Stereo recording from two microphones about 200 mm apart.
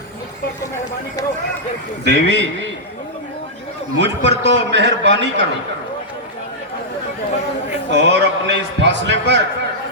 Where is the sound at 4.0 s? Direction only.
60° right (ahead or behind).